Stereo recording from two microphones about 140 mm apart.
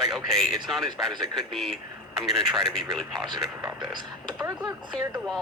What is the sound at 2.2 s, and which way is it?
Speech, centre (ahead or behind).